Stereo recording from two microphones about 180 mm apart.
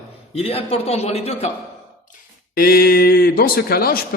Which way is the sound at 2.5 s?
55° left (ahead or behind).